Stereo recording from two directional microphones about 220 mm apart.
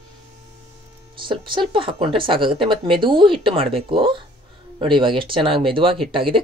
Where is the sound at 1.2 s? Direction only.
20° right (ahead or behind).